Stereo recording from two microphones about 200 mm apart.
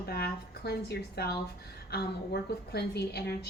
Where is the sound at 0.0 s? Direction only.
50° left (ahead or behind).